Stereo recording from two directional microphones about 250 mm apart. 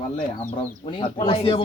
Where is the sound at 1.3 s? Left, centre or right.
Left.